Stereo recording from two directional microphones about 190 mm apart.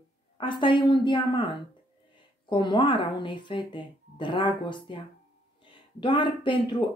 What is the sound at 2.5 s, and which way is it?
Speech, 25° left (ahead or behind).